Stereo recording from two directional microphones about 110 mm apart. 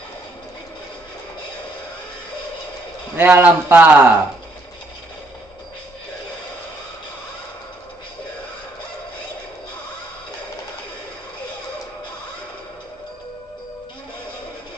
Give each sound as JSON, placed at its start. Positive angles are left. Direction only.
{"t": 3.2, "sound": "a man's voice", "side_deg": -20}